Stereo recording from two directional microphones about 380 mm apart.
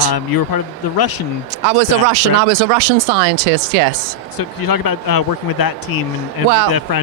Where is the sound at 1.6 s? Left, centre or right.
Right.